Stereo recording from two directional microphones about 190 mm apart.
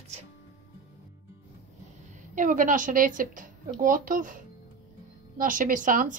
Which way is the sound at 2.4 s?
45° right (ahead or behind).